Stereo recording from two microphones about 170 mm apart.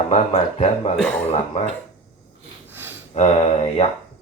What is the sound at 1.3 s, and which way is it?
Speech, 40° left (ahead or behind).